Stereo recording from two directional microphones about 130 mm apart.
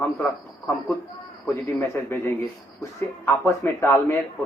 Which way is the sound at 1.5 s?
20° left (ahead or behind).